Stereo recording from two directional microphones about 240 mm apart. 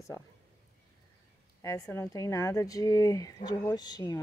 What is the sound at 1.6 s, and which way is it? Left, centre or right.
Speech, centre.